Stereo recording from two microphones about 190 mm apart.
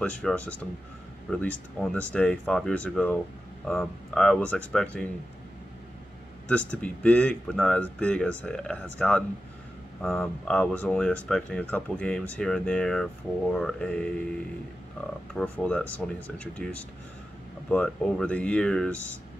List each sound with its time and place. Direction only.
0.0 s speech: 5° left (ahead or behind)
6.5 s speech: 5° left (ahead or behind)
15.3 s speech: 5° left (ahead or behind)
17.6 s speech: 5° left (ahead or behind)